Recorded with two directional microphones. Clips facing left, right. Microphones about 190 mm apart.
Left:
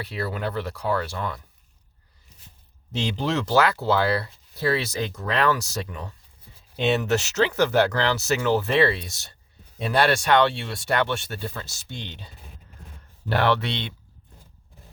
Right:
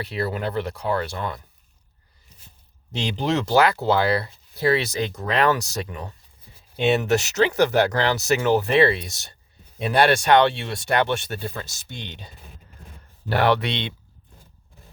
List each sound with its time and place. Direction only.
0.1 s speech: 20° right (ahead or behind)
2.9 s speech: 15° right (ahead or behind)